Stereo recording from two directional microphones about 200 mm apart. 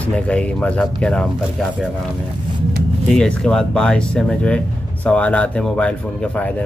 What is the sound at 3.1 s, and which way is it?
Speech, 5° left (ahead or behind).